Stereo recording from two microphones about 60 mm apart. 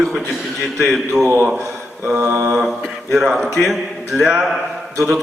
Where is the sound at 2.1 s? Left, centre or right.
Right.